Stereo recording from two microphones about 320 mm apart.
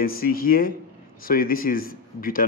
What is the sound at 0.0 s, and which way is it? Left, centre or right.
Speech, left.